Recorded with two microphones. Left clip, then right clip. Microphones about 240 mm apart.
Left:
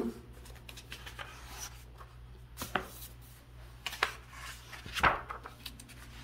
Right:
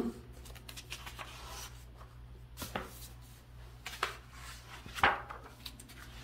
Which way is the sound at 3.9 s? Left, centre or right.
Left.